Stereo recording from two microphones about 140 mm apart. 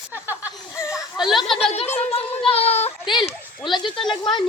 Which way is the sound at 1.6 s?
50° left (ahead or behind).